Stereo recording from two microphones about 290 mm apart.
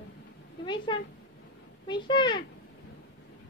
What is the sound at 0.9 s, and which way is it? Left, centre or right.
Speech, centre.